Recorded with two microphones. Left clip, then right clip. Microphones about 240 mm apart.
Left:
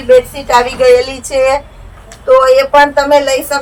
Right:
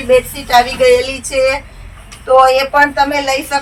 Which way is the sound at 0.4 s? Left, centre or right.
Centre.